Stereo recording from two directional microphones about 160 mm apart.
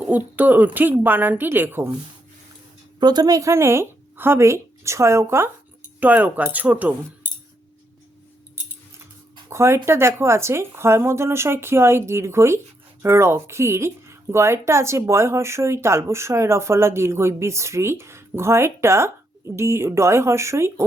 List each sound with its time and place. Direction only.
0.0 s speech: 10° right (ahead or behind)
3.0 s speech: 25° right (ahead or behind); by 6.9 s 10° right (ahead or behind)
9.5 s speech: 15° right (ahead or behind)